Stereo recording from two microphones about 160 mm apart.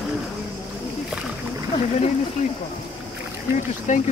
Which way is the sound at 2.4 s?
50° left (ahead or behind).